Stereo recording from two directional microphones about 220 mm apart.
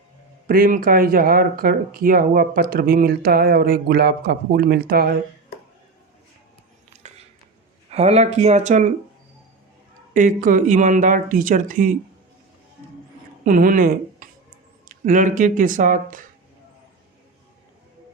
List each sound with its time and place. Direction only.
0.4 s speech: 40° right (ahead or behind)
7.9 s speech: 30° right (ahead or behind)
10.2 s speech: 35° right (ahead or behind)
13.4 s speech: 40° right (ahead or behind)